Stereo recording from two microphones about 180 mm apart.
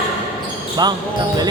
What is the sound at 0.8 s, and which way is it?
Speech, 25° right (ahead or behind).